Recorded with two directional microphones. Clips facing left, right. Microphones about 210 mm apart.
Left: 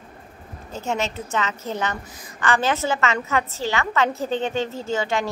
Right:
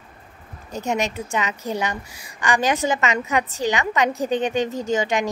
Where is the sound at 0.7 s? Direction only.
15° right (ahead or behind).